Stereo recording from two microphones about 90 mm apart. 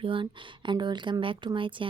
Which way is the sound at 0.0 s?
70° right (ahead or behind).